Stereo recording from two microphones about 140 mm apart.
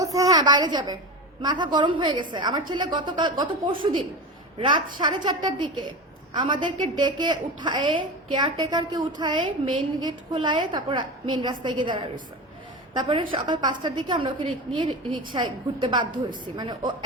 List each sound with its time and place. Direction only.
0.0 s a sound: 25° right (ahead or behind)
1.4 s a woman's voice: 35° right (ahead or behind)
5.2 s a woman's voice: 35° right (ahead or behind)